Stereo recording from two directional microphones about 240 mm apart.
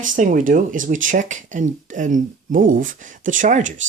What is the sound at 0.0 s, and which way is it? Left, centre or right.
Speech, right.